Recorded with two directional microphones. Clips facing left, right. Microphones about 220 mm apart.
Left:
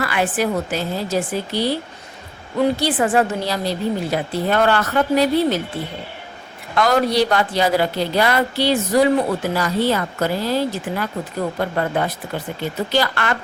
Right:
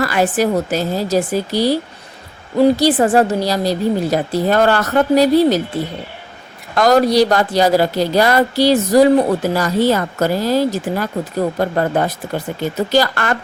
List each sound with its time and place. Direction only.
0.0 s speech: 40° right (ahead or behind)
6.7 s speech: 40° right (ahead or behind)